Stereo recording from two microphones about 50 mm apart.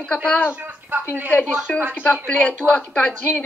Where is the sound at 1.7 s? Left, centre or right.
Left.